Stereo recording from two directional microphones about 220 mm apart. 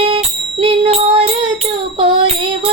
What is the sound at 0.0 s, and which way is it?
Music, 25° right (ahead or behind).